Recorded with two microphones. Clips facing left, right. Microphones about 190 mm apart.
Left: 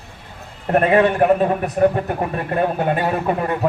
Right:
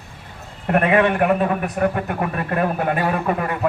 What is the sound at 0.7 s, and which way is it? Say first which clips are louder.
A man's voice: left 2 dB; 35° left (ahead or behind).